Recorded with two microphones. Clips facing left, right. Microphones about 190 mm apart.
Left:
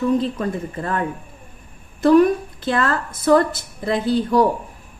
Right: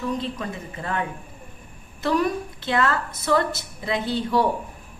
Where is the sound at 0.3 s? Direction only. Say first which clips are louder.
Left 7 dB; 50° left (ahead or behind).